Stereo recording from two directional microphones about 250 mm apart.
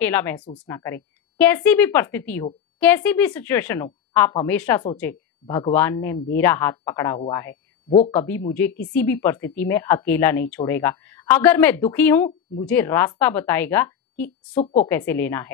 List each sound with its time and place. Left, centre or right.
0.0 s a woman's voice: centre
14.5 s a woman's voice: left
14.9 s speech: centre